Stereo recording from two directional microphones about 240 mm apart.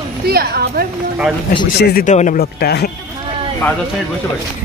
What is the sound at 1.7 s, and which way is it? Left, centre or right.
Speech, left.